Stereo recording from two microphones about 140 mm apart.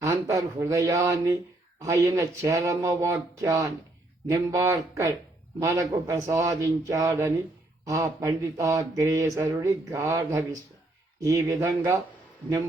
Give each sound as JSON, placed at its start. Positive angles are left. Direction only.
{"t": 0.0, "sound": "a man's voice", "side_deg": -20}